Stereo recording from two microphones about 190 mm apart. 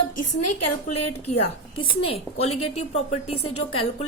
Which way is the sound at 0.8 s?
35° left (ahead or behind).